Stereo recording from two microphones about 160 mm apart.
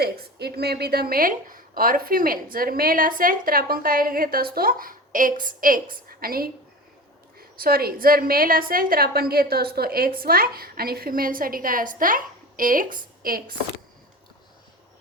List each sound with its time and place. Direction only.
0.0 s a woman's voice: 85° right; by 13.4 s 65° right (ahead or behind)